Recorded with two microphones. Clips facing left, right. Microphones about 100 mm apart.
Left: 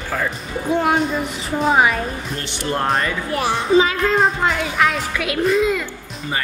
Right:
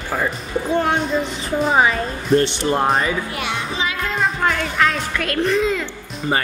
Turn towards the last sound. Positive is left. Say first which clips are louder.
# left 1 dB
turn(degrees=5)  # may be behind; listen again after turning